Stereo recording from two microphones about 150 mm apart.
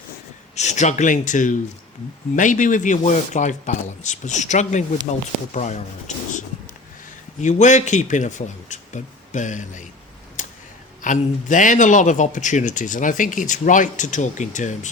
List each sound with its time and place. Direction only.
0.5 s a man's voice: 50° left (ahead or behind)
7.4 s speech: 55° left (ahead or behind)
10.4 s a sound: 55° left (ahead or behind)
11.0 s speech: 55° left (ahead or behind)